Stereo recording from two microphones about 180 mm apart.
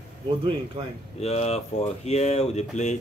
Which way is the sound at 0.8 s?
30° right (ahead or behind).